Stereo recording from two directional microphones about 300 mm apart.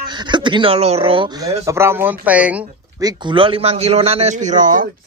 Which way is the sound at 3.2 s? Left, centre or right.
Centre.